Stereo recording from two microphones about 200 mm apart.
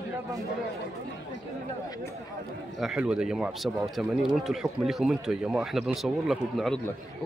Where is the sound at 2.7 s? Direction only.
5° right (ahead or behind).